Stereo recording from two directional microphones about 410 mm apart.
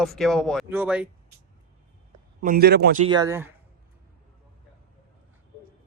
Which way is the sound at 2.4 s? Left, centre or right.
Right.